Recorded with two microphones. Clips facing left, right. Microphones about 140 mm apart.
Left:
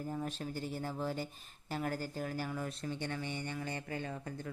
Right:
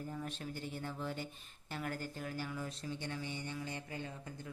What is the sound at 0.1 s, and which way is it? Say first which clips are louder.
Speech: left 4 dB; 35° left (ahead or behind).